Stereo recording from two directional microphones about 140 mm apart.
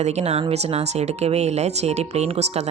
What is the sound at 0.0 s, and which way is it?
Speech, 50° right (ahead or behind).